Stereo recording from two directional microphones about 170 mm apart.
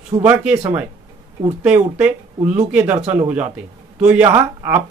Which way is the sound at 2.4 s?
40° right (ahead or behind).